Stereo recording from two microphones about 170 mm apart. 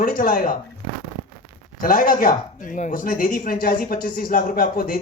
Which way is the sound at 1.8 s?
55° left (ahead or behind).